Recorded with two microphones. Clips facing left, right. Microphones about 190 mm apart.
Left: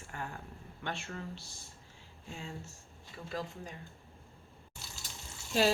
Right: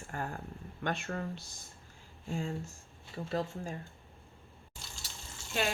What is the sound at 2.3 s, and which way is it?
Speech, 50° right (ahead or behind).